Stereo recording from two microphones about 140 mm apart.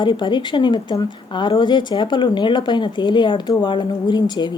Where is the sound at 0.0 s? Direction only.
35° left (ahead or behind).